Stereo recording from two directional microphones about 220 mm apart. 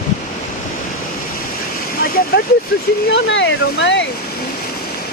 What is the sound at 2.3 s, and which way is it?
Speech, 45° left (ahead or behind).